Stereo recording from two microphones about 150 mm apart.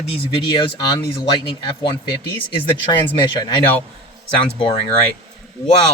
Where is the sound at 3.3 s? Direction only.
30° left (ahead or behind).